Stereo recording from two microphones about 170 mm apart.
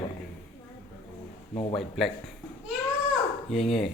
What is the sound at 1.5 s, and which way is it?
Speech, 30° left (ahead or behind).